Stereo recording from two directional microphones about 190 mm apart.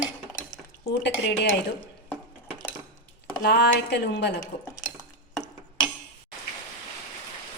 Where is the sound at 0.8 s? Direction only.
60° left (ahead or behind).